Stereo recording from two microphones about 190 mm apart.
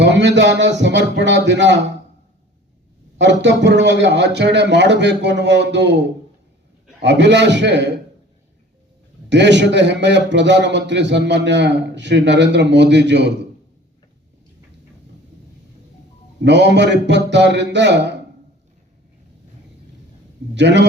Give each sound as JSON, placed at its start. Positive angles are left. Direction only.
{"t": 0.0, "sound": "a man's voice", "side_deg": -65}
{"t": 3.2, "sound": "a man's voice", "side_deg": -70}
{"t": 9.3, "sound": "a man's voice", "side_deg": -65}
{"t": 16.4, "sound": "speech", "side_deg": -65}
{"t": 20.6, "sound": "speech", "side_deg": -65}